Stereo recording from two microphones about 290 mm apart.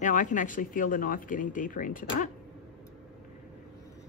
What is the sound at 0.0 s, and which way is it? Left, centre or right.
Speech, left.